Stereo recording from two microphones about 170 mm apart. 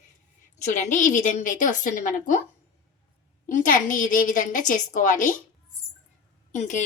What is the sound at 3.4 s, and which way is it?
A woman's voice, 50° left (ahead or behind).